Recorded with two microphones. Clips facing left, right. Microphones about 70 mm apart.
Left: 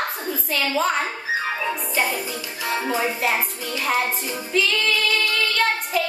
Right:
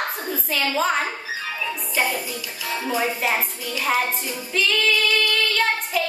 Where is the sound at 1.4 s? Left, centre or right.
Left.